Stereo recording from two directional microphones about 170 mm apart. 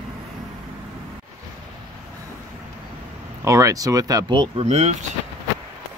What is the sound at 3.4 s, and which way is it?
Speech, 20° right (ahead or behind).